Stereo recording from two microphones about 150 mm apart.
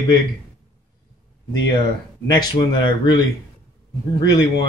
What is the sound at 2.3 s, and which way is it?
Speech, 30° left (ahead or behind).